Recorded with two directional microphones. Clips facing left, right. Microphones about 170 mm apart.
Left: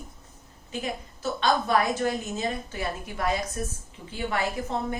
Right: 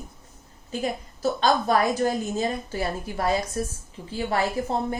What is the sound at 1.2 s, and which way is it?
A woman's voice, 35° right (ahead or behind).